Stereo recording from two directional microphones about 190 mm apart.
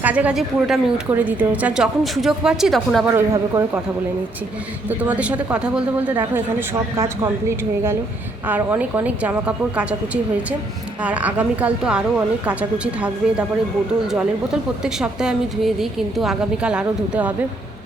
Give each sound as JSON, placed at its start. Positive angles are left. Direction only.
{"t": 0.0, "sound": "a woman's voice", "side_deg": -5}
{"t": 3.3, "sound": "speech", "side_deg": -20}
{"t": 4.9, "sound": "a woman's voice", "side_deg": -10}